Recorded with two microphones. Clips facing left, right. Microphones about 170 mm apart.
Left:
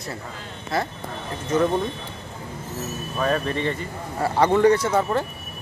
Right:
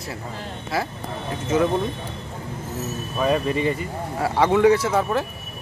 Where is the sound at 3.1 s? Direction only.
10° right (ahead or behind).